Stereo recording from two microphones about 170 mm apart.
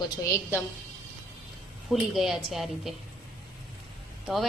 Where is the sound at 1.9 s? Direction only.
Centre (ahead or behind).